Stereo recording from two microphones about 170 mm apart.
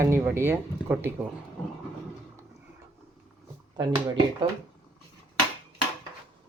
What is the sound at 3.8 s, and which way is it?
Speech, 30° right (ahead or behind).